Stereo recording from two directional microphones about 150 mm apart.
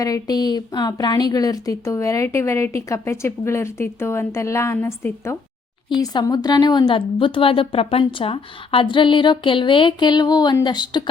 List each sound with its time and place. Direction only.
0.0 s a woman's voice: 25° left (ahead or behind)